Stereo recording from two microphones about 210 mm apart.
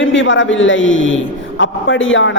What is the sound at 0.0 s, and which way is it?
A man's voice, 65° left (ahead or behind).